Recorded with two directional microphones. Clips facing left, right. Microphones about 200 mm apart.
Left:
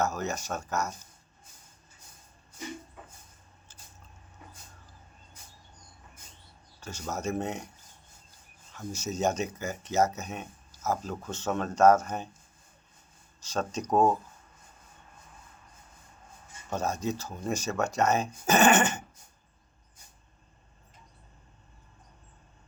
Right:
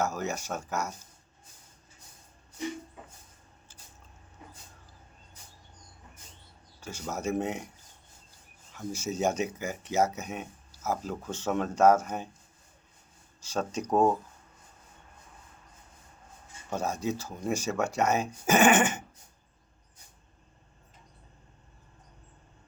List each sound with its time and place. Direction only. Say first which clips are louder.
0.0 s speech: left 1 dB; 10° right (ahead or behind)
6.8 s speech: right 1 dB; 10° right (ahead or behind)
8.7 s speech: right 1 dB; 10° right (ahead or behind)
13.4 s speech: even; 10° right (ahead or behind)
16.6 s speech: even; 10° right (ahead or behind)